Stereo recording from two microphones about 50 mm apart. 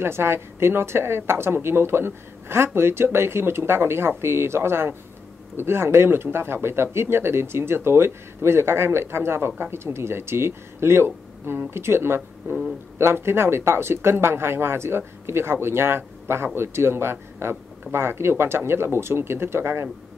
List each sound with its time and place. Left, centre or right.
0.0 s speech: right